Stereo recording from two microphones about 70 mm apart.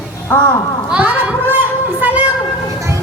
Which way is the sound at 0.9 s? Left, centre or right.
Right.